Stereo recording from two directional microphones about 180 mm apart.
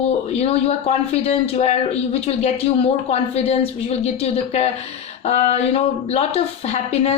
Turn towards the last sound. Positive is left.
turn(degrees=35)  # may be behind; listen again after turning